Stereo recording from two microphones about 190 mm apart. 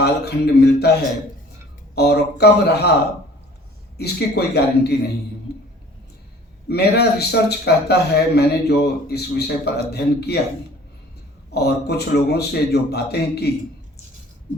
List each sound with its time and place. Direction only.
0.0 s a man's voice: 60° left (ahead or behind)
2.0 s a man's voice: 60° left (ahead or behind)
3.9 s a man's voice: 60° left (ahead or behind)
5.5 s a sound: 60° left (ahead or behind)
6.7 s a man's voice: 60° left (ahead or behind)
11.5 s a man's voice: 60° left (ahead or behind)